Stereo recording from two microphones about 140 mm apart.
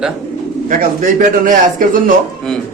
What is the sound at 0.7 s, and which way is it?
Speech, 70° right (ahead or behind).